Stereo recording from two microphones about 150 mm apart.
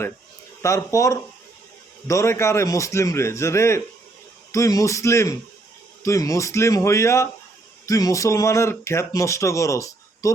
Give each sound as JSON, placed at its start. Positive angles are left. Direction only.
{"t": 0.6, "sound": "speech", "side_deg": 20}